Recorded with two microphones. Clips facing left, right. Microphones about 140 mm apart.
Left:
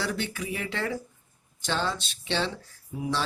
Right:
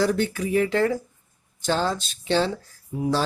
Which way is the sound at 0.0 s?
40° right (ahead or behind).